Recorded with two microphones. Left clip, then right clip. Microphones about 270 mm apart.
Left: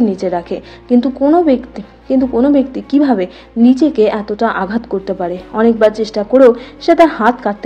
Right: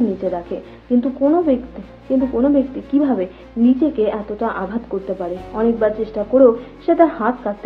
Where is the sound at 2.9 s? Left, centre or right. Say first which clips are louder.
Left 5 dB; left.